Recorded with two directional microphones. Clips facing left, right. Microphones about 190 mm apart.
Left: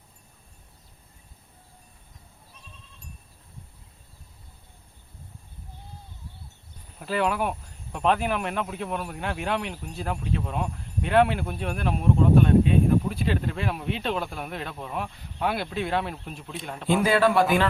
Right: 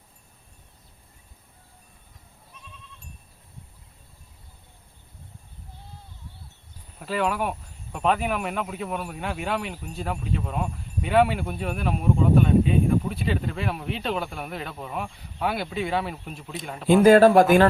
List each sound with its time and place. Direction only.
7.0 s speech: centre (ahead or behind)
17.0 s speech: 45° right (ahead or behind)